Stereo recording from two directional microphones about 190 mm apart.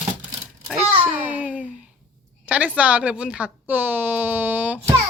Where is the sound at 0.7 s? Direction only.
5° right (ahead or behind).